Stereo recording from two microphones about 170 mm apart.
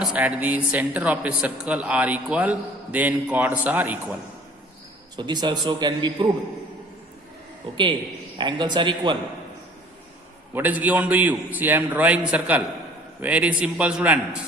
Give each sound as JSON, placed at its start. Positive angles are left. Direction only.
{"t": 0.0, "sound": "a man's voice", "side_deg": -5}
{"t": 5.1, "sound": "a man's voice", "side_deg": -25}
{"t": 8.4, "sound": "a man's voice", "side_deg": -25}
{"t": 10.5, "sound": "a man's voice", "side_deg": -10}